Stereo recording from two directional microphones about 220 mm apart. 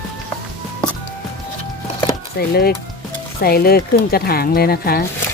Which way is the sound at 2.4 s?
45° left (ahead or behind).